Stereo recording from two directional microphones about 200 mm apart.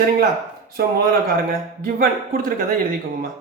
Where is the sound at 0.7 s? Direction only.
50° right (ahead or behind).